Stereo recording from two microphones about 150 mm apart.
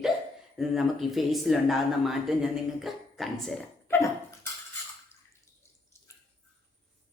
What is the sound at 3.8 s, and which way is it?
Dog, 20° left (ahead or behind).